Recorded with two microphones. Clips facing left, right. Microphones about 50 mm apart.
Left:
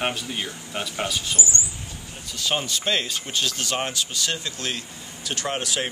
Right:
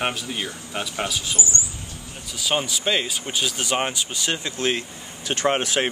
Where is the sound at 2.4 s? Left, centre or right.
Centre; by 5.9 s right.